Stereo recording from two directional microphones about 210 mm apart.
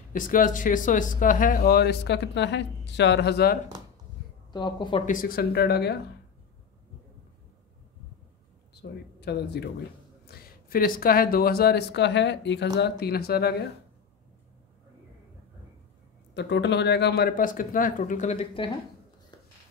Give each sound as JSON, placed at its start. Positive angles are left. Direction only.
{"t": 0.1, "sound": "speech", "side_deg": 40}
{"t": 4.5, "sound": "speech", "side_deg": 20}
{"t": 5.0, "sound": "speech", "side_deg": 40}
{"t": 8.8, "sound": "speech", "side_deg": 50}
{"t": 16.3, "sound": "speech", "side_deg": 55}